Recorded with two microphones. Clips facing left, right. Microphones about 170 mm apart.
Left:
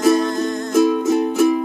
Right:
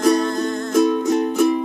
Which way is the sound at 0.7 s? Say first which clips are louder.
Left 1 dB; 5° left (ahead or behind).